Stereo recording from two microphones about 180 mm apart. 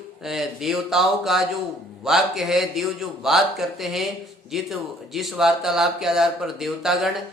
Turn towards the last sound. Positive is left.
turn(degrees=0)  # may be behind; listen again after turning